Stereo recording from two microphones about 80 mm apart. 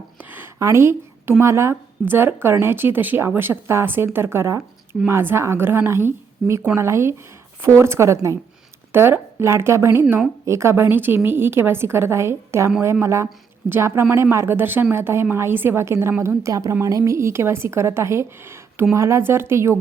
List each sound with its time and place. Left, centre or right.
0.2 s a sound: right
0.6 s speech: right
16.4 s speech: right